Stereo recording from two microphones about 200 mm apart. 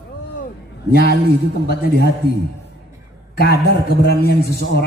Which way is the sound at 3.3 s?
55° left (ahead or behind).